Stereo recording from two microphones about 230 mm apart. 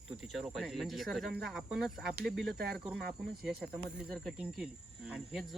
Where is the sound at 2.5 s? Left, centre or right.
Right.